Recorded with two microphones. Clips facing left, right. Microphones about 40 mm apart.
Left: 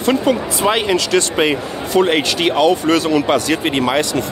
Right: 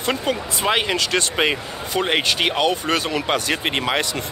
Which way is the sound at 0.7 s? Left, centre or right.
Right.